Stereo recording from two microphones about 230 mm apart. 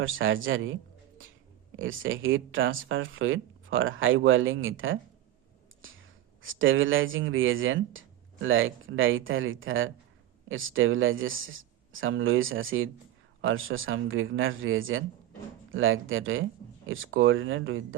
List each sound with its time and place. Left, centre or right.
0.0 s speech: right
5.8 s whispering: right
6.4 s speech: right